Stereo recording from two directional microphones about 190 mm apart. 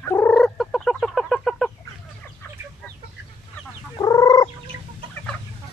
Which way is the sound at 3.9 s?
20° left (ahead or behind).